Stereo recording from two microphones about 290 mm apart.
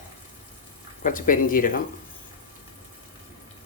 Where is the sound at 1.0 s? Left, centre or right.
Left.